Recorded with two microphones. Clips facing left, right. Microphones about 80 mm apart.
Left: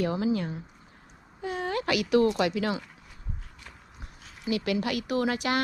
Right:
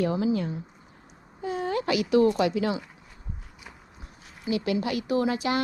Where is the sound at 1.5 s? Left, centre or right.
Left.